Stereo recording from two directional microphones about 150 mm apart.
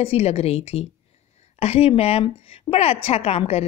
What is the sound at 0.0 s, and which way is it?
A woman's voice, 40° left (ahead or behind).